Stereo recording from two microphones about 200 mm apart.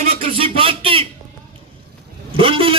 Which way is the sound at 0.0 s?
30° right (ahead or behind).